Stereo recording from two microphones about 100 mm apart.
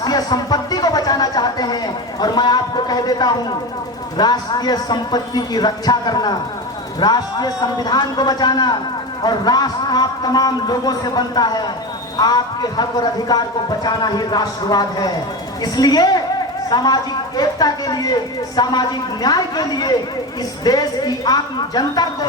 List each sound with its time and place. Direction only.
0.0 s speech: 40° left (ahead or behind)